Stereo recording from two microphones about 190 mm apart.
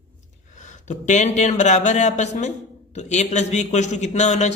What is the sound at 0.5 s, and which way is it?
A man's voice, 40° left (ahead or behind).